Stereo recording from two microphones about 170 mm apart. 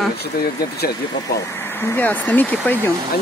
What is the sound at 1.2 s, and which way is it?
Speech, 15° left (ahead or behind).